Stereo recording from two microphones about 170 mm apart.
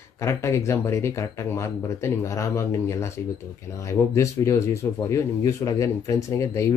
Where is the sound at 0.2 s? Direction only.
15° left (ahead or behind).